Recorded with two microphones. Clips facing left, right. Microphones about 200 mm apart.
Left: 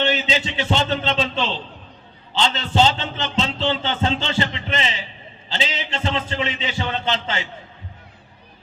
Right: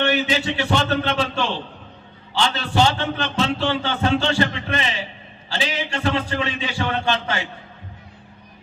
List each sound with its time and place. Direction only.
0.0 s a man's voice: 20° left (ahead or behind)